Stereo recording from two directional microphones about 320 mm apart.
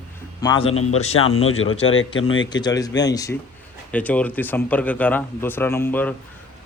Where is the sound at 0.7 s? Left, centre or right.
Left.